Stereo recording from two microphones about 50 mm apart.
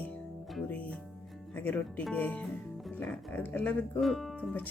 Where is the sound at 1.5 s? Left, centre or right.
Left.